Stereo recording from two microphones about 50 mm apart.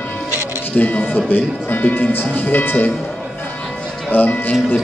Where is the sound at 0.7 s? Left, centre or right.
Left.